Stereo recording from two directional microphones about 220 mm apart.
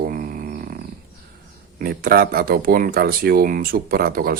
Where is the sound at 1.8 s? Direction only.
45° right (ahead or behind).